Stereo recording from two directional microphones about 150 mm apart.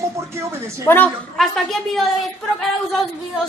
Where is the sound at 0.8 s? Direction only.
10° left (ahead or behind).